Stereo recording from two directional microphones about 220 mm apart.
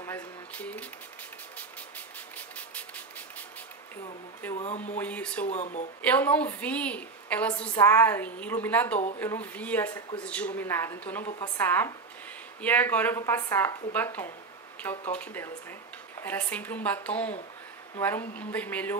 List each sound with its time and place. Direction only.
0.0 s a sound: 10° left (ahead or behind)
2.0 s a sound: 5° left (ahead or behind)
4.6 s speech: 30° left (ahead or behind)
4.9 s a woman's voice: 5° left (ahead or behind)
5.5 s speech: 30° left (ahead or behind)
6.0 s a woman's voice: 5° left (ahead or behind)
11.2 s a woman's voice: 25° left (ahead or behind)
11.5 s a woman's voice: 10° left (ahead or behind)